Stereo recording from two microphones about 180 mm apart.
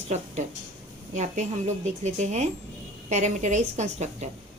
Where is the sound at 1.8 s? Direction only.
40° right (ahead or behind).